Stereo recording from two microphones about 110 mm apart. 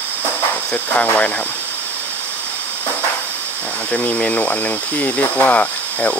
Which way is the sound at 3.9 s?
10° left (ahead or behind).